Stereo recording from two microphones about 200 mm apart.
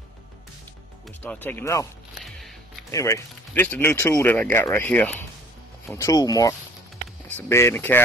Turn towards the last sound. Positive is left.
turn(degrees=10)  # may be behind; listen again after turning